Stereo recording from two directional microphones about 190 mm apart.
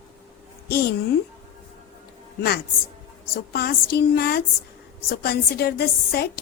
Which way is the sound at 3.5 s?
55° left (ahead or behind).